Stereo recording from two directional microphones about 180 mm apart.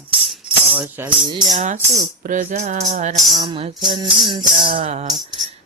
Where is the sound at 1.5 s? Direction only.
45° right (ahead or behind).